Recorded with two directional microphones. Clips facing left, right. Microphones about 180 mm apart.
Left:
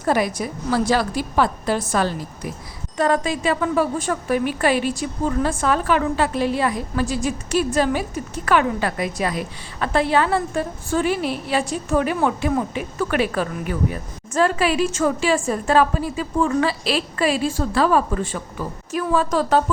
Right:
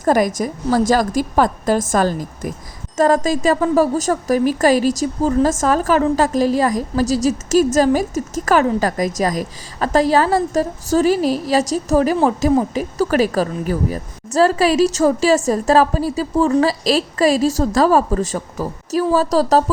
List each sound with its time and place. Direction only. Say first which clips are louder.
0.0 s a woman's voice: right 5 dB; 45° right (ahead or behind)